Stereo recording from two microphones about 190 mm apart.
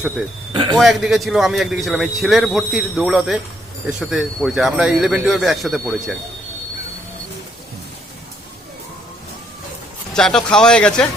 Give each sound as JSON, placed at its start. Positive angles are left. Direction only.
{"t": 0.5, "sound": "a man's voice", "side_deg": -25}
{"t": 0.8, "sound": "a man's voice", "side_deg": 0}
{"t": 10.2, "sound": "a man's voice", "side_deg": 5}